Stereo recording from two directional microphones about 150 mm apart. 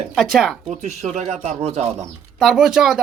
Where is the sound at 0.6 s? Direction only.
45° right (ahead or behind).